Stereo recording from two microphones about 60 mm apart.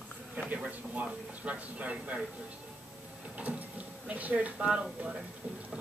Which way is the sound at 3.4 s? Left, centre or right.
Right.